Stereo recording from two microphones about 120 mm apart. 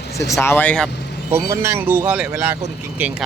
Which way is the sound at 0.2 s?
25° left (ahead or behind).